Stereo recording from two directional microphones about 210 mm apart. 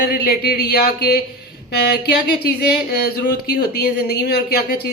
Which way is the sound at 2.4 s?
50° left (ahead or behind).